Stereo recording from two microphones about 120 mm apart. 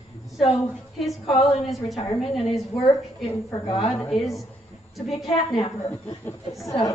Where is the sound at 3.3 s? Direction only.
30° left (ahead or behind).